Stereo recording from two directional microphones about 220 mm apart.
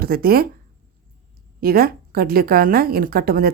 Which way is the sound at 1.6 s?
40° right (ahead or behind).